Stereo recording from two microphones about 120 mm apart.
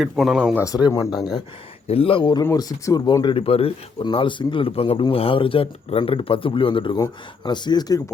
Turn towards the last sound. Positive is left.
turn(degrees=35)  # may be behind; listen again after turning